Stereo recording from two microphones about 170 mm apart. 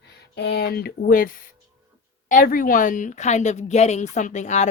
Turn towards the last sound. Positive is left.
turn(degrees=45)  # may be behind; listen again after turning